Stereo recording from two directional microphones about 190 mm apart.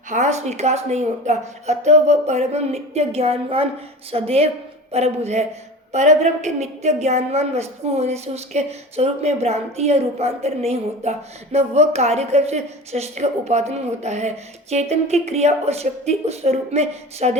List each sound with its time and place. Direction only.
0.1 s a woman's voice: 40° right (ahead or behind)